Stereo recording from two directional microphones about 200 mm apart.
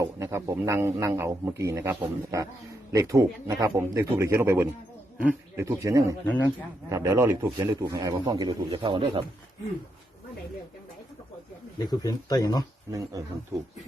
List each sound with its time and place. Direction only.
0.0 s a man's voice: 15° right (ahead or behind)
6.2 s speech: 10° left (ahead or behind)
6.9 s a man's voice: 15° right (ahead or behind)
11.8 s speech: 20° left (ahead or behind)
12.9 s a man's voice: 15° right (ahead or behind)